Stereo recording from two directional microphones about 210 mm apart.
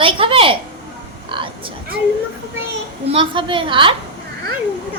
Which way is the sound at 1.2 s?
25° right (ahead or behind).